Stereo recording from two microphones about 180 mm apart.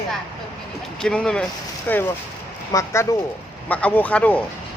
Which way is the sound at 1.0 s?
5° left (ahead or behind).